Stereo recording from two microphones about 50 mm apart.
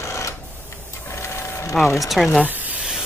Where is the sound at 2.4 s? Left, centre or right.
Right.